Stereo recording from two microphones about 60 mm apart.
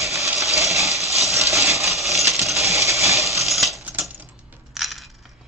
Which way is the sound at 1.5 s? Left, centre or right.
Right.